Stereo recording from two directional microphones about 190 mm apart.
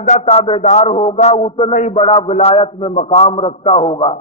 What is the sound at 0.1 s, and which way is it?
A man's voice, 30° left (ahead or behind).